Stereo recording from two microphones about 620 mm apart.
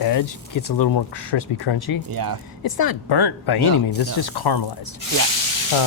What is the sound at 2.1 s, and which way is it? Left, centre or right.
Speech, right.